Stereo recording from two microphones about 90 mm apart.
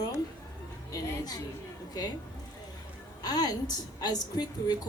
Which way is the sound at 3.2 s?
50° left (ahead or behind).